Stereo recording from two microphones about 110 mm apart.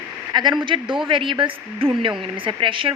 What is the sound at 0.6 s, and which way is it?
A woman's voice, 50° right (ahead or behind).